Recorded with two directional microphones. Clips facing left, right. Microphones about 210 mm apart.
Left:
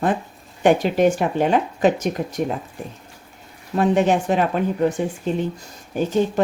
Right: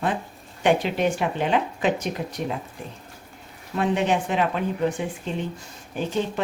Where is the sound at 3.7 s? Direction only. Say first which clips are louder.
Left 5 dB; 45° left (ahead or behind).